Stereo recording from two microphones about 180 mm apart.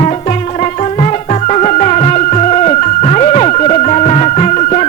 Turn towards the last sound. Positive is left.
turn(degrees=40)  # may be behind; listen again after turning